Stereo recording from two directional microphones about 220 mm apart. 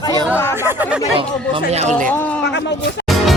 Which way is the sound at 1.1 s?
25° right (ahead or behind).